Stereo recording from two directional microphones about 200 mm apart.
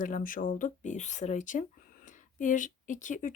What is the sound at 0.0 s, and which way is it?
Speech, 40° left (ahead or behind).